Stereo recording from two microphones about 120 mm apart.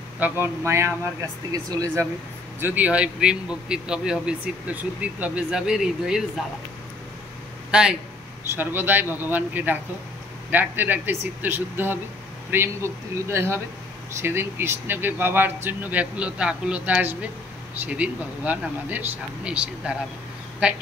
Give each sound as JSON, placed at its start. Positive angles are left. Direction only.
{"t": 0.2, "sound": "speech", "side_deg": -20}
{"t": 2.6, "sound": "a man's voice", "side_deg": -15}
{"t": 8.5, "sound": "a man's voice", "side_deg": -15}